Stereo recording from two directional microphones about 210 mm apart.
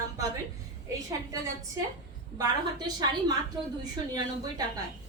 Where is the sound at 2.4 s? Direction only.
20° right (ahead or behind).